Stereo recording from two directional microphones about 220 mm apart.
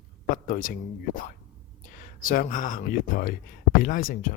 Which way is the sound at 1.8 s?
40° left (ahead or behind).